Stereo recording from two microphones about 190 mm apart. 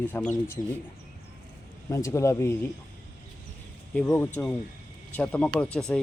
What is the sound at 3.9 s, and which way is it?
Speech, 5° left (ahead or behind).